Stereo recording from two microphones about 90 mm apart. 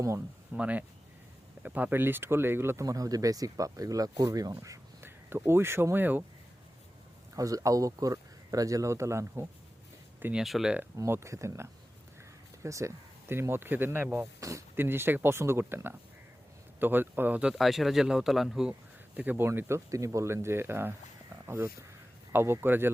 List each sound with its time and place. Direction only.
0.5 s speech: 15° right (ahead or behind)
2.8 s speech: 40° right (ahead or behind)
5.0 s speech: 25° right (ahead or behind)
7.3 s speech: 40° right (ahead or behind)
10.3 s a man's voice: 5° right (ahead or behind)
10.9 s speech: 30° right (ahead or behind)
17.5 s a man's voice: centre (ahead or behind)
19.1 s speech: 20° right (ahead or behind)
19.5 s a man's voice: 30° right (ahead or behind)